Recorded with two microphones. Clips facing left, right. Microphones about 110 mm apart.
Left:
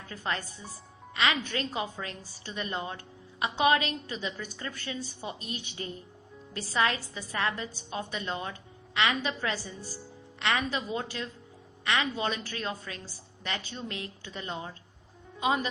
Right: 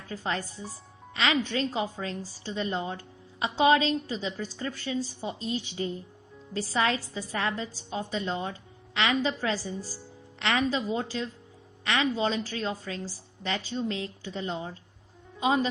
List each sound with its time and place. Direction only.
0.1 s a woman's voice: 30° right (ahead or behind)